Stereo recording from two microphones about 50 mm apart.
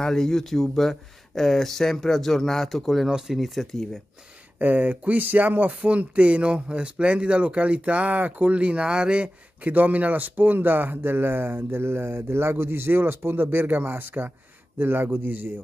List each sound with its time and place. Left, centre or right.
0.0 s speech: centre
3.1 s speech: centre
3.3 s speech: centre
4.6 s a man's voice: right